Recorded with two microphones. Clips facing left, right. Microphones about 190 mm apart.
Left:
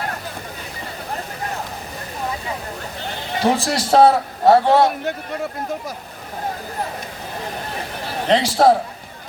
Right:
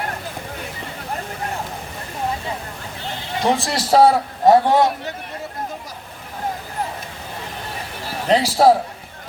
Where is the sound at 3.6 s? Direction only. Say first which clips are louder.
Even; centre (ahead or behind).